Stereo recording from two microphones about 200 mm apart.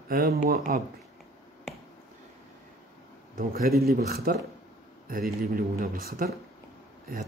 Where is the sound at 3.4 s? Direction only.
45° right (ahead or behind).